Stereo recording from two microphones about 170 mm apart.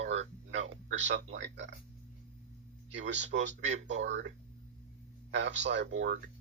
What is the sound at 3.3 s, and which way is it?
Speech, 80° right.